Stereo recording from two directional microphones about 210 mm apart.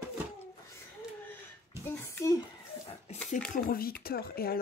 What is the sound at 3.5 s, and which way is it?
Speech, 45° left (ahead or behind).